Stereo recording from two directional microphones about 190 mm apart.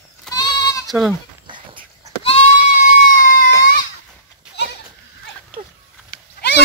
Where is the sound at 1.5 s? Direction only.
25° right (ahead or behind).